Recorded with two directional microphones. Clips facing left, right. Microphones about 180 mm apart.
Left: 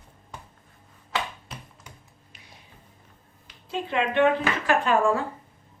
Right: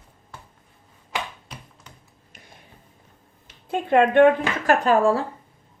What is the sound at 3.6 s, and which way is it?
Speech, 50° right (ahead or behind).